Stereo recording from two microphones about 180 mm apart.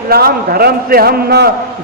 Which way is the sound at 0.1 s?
60° right (ahead or behind).